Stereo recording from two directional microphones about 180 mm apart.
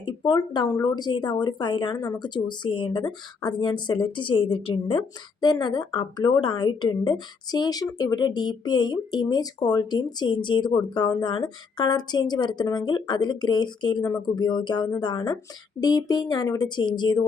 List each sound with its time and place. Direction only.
0.0 s speech: 25° left (ahead or behind)